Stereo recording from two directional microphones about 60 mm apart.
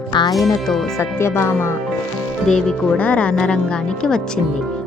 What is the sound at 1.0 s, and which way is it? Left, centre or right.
Speech, left.